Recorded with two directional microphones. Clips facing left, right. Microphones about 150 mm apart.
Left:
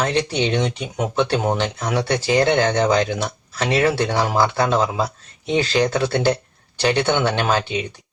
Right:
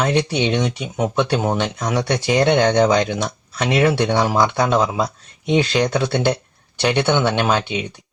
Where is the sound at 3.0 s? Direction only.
10° left (ahead or behind).